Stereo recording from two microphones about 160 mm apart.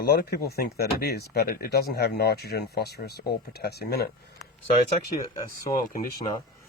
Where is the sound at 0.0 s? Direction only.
75° left (ahead or behind).